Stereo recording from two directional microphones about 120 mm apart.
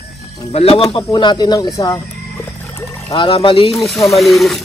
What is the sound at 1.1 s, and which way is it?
Speech, 40° left (ahead or behind).